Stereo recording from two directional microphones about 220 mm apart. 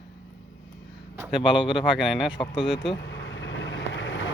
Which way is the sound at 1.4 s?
5° right (ahead or behind).